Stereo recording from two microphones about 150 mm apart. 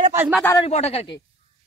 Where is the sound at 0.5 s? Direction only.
45° left (ahead or behind).